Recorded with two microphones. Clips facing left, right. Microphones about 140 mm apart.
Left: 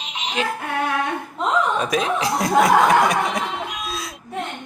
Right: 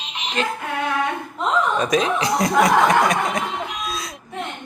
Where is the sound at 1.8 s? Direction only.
5° left (ahead or behind).